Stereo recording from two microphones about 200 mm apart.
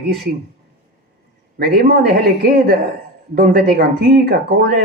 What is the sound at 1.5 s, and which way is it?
Speech, 50° right (ahead or behind).